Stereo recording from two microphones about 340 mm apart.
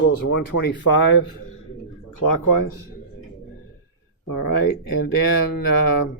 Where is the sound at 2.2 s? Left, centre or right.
Left.